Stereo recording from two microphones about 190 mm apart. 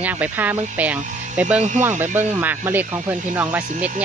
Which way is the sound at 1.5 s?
40° right (ahead or behind).